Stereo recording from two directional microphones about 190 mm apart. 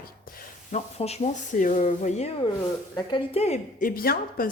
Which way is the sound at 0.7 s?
35° left (ahead or behind).